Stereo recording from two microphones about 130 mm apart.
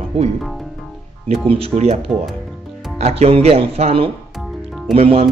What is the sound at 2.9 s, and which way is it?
Speech, 55° right (ahead or behind).